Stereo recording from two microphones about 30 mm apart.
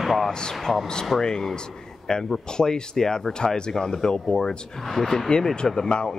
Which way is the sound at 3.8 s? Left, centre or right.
Centre.